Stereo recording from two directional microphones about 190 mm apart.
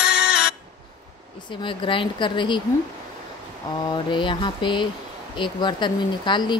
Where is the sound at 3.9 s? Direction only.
25° left (ahead or behind).